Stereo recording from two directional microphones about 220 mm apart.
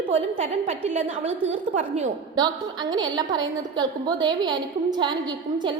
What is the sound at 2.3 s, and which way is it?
A woman's voice, 20° right (ahead or behind).